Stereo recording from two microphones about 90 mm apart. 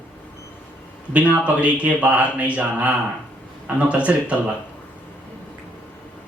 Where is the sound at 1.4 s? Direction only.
15° right (ahead or behind).